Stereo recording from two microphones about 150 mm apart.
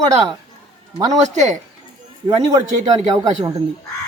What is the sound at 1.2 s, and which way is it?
Speech, 50° right (ahead or behind).